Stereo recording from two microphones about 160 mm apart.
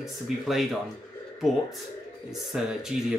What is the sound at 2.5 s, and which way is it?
Speech, 5° right (ahead or behind).